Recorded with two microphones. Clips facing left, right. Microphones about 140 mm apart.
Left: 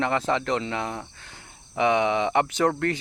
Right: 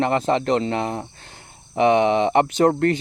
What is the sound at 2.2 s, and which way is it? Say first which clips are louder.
Speech: right 5 dB; 40° right (ahead or behind).